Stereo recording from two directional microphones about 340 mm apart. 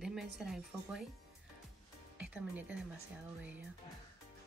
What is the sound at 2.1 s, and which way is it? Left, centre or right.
Speech, centre.